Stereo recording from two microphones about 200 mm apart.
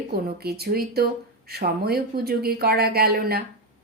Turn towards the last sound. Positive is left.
turn(degrees=-50)  # may be behind; listen again after turning